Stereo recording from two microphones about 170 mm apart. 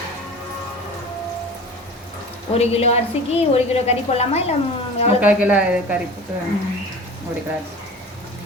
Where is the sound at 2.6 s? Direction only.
40° left (ahead or behind).